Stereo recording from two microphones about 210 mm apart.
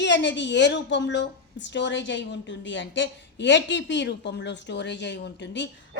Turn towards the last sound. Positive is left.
turn(degrees=55)  # may be behind; listen again after turning